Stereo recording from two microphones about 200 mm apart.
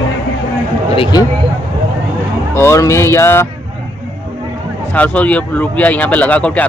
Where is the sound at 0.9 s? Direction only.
25° left (ahead or behind).